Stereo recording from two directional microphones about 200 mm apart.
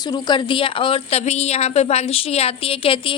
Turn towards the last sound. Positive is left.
turn(degrees=25)  # may be behind; listen again after turning